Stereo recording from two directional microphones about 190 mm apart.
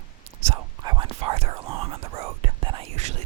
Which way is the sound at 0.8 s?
25° right (ahead or behind).